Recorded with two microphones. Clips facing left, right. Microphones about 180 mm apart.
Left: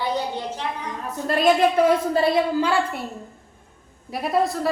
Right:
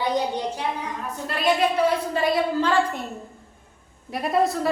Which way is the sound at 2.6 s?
10° left (ahead or behind).